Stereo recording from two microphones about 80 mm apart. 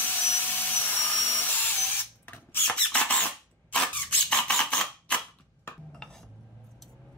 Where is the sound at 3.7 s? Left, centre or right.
Centre.